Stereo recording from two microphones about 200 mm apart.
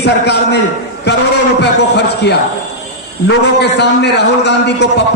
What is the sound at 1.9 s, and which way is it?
A man's voice, 55° left (ahead or behind).